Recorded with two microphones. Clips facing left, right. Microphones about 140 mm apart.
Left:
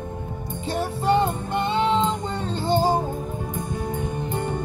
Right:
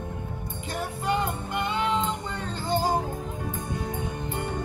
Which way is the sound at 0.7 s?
25° left (ahead or behind).